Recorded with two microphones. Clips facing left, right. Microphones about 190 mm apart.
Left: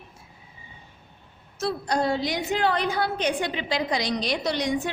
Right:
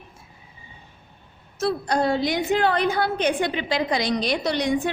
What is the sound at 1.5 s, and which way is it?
A woman's voice, 55° right (ahead or behind).